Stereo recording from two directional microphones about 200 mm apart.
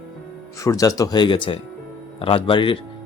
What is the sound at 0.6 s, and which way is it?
Speech, 15° left (ahead or behind).